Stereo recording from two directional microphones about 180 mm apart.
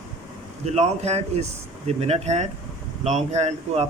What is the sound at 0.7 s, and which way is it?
Speech, 35° right (ahead or behind).